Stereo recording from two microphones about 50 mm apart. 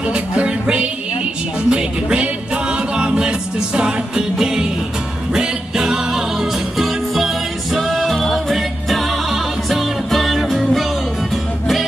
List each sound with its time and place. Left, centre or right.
0.1 s music: right; by 10.9 s centre